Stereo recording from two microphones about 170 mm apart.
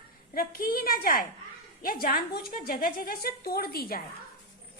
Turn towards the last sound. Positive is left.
turn(degrees=65)  # may be behind; listen again after turning